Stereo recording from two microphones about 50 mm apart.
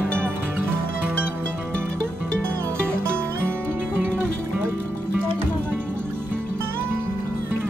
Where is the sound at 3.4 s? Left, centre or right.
Right.